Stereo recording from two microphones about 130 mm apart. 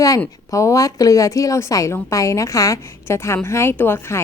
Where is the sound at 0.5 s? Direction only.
25° left (ahead or behind).